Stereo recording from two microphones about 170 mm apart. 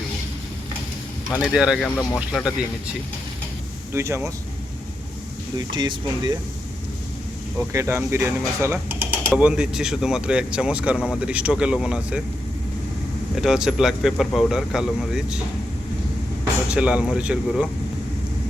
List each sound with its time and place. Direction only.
1.3 s speech: 5° right (ahead or behind)
3.9 s speech: 15° right (ahead or behind)
5.5 s speech: 25° right (ahead or behind)
7.7 s speech: 15° right (ahead or behind)
9.3 s speech: 5° right (ahead or behind)
13.4 s speech: 5° right (ahead or behind)
16.4 s speech: 5° right (ahead or behind)